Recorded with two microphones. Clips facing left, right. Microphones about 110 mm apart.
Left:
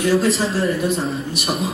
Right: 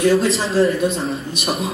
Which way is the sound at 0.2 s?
25° right (ahead or behind).